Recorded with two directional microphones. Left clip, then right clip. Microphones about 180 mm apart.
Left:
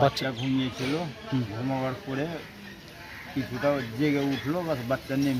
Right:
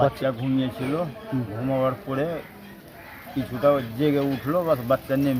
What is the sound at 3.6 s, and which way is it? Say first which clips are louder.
Speech: right 6 dB; 20° right (ahead or behind).